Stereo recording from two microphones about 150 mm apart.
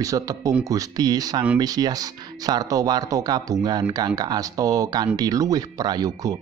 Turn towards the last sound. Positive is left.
turn(degrees=-25)  # may be behind; listen again after turning